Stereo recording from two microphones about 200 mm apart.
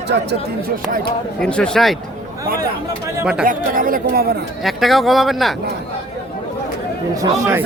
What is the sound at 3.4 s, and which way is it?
Speech, 45° right (ahead or behind).